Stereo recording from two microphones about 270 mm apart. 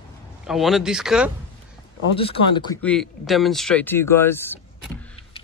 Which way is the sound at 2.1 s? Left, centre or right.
Centre.